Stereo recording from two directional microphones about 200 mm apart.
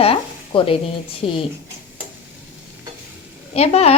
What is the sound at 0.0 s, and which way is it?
Sizzle, 30° left (ahead or behind).